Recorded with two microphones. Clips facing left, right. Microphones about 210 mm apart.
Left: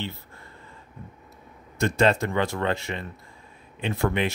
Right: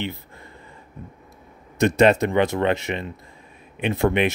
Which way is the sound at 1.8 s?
20° right (ahead or behind).